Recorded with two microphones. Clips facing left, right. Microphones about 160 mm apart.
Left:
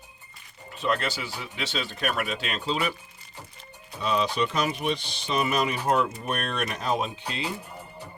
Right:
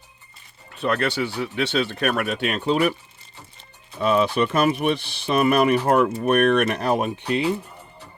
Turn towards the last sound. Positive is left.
turn(degrees=-60)  # may be behind; listen again after turning